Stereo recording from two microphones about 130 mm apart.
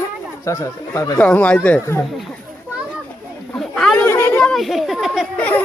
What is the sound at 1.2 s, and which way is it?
Speech, 10° left (ahead or behind).